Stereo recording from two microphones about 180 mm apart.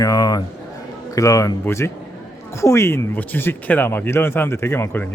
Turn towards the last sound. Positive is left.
turn(degrees=10)  # may be behind; listen again after turning